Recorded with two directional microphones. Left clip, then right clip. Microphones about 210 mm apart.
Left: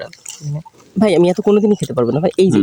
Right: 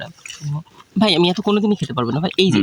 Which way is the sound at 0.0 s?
25° right (ahead or behind).